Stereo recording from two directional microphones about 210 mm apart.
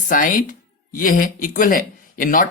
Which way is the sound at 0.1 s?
40° left (ahead or behind).